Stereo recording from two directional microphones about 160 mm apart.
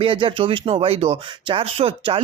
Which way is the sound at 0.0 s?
30° right (ahead or behind).